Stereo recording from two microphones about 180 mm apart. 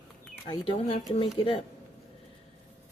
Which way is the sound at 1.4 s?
25° left (ahead or behind).